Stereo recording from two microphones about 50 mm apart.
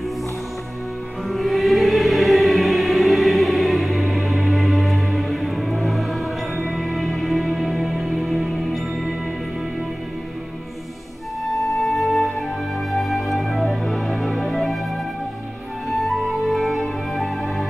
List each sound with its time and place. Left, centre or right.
1.3 s music: centre
11.9 s music: centre
16.0 s music: centre